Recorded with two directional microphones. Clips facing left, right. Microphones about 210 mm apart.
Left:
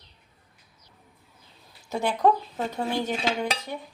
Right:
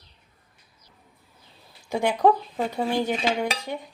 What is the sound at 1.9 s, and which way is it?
Dishes, 10° right (ahead or behind).